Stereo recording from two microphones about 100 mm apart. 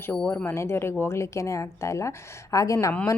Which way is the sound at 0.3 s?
25° left (ahead or behind).